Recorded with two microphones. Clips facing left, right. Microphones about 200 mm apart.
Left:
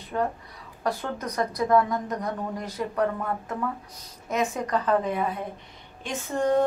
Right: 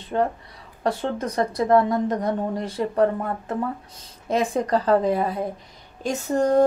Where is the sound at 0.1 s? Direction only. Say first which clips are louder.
Right 4 dB; 30° right (ahead or behind).